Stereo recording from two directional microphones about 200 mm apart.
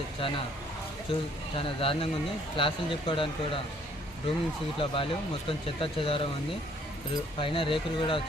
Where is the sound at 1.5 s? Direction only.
25° left (ahead or behind).